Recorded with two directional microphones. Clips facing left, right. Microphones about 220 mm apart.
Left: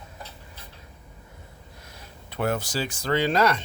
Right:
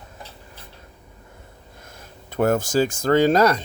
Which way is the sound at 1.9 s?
45° right (ahead or behind).